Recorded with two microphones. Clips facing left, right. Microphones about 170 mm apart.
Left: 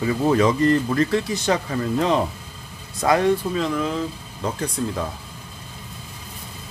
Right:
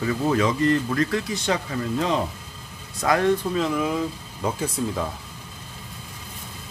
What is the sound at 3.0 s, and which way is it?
Speech, 30° left (ahead or behind).